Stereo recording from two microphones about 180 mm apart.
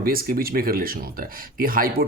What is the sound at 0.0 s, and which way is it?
Speech, 55° right (ahead or behind).